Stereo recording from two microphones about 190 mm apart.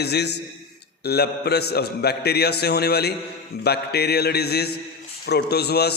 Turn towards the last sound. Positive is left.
turn(degrees=60)  # may be behind; listen again after turning